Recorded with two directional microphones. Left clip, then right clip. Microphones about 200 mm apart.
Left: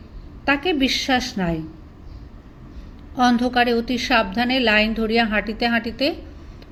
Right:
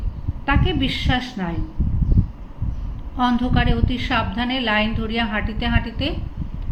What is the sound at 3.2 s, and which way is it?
A woman's voice, 45° left (ahead or behind).